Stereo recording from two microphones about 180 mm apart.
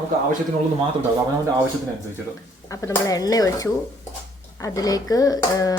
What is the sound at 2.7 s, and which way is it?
Speech, 20° left (ahead or behind).